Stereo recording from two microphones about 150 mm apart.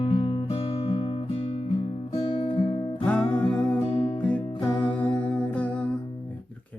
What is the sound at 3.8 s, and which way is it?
Music, 40° left (ahead or behind).